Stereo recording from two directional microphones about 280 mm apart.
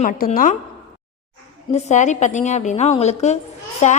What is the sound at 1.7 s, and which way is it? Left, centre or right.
A woman's voice, left.